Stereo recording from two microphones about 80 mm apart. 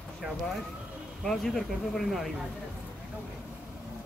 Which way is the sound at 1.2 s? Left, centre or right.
Centre.